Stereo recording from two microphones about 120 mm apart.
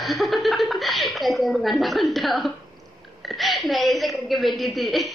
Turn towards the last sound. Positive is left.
turn(degrees=0)  # may be behind; listen again after turning